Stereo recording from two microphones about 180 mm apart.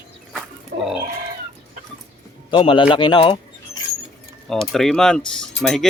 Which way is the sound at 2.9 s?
25° left (ahead or behind).